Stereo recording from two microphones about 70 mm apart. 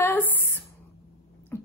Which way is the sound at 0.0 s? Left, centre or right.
Left.